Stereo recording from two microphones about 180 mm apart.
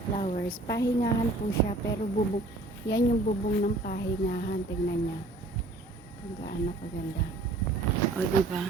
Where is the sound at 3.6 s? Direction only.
50° left (ahead or behind).